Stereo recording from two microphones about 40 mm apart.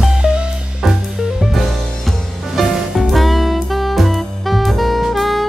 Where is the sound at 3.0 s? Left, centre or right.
Centre.